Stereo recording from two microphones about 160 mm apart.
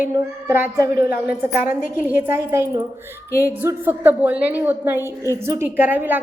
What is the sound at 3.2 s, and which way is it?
Speech, 20° left (ahead or behind).